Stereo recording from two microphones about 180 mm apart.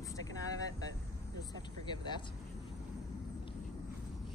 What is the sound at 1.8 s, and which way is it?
Speech, 25° left (ahead or behind).